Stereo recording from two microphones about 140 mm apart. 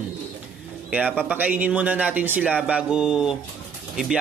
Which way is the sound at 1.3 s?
10° right (ahead or behind).